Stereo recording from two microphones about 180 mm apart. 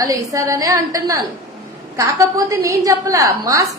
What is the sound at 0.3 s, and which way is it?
A woman's voice, 20° right (ahead or behind).